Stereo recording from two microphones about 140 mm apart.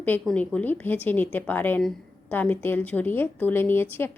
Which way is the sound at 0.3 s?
10° left (ahead or behind).